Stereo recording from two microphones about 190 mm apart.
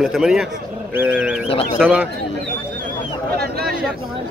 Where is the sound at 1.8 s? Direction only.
10° right (ahead or behind).